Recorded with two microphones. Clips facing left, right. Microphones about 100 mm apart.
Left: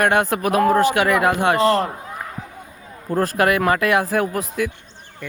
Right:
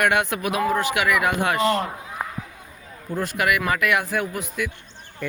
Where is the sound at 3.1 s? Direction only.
40° left (ahead or behind).